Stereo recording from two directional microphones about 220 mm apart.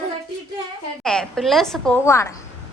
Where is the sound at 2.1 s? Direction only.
15° left (ahead or behind).